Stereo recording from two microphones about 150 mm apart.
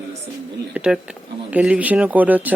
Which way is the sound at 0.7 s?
5° right (ahead or behind).